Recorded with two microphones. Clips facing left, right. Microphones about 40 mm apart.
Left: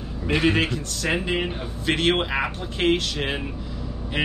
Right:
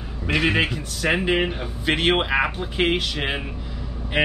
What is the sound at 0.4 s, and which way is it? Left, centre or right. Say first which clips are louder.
Speech: right 1 dB; centre.